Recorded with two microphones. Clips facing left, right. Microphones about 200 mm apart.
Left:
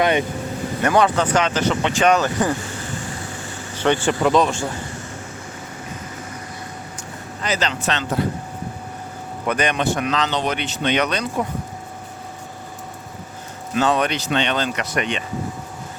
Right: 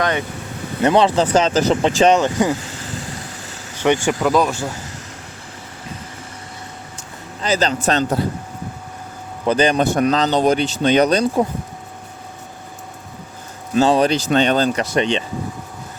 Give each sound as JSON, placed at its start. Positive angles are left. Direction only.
{"t": 0.0, "sound": "speech", "side_deg": 20}
{"t": 0.8, "sound": "speech", "side_deg": -25}
{"t": 3.8, "sound": "speech", "side_deg": -15}
{"t": 4.2, "sound": "speech", "side_deg": -5}
{"t": 7.4, "sound": "a man's voice", "side_deg": -35}
{"t": 9.5, "sound": "a man's voice", "side_deg": -30}
{"t": 13.7, "sound": "a man's voice", "side_deg": -30}